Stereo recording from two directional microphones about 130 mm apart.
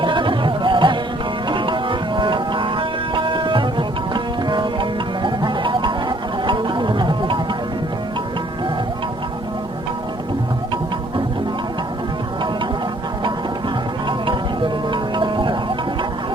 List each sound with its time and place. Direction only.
0.0 s music: 40° right (ahead or behind)
14.1 s music: 35° right (ahead or behind)